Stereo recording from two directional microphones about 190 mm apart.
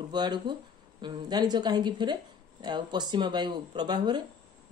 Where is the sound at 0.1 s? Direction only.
25° right (ahead or behind).